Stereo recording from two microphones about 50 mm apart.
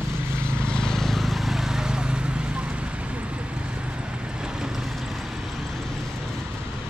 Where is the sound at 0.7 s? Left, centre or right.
Centre.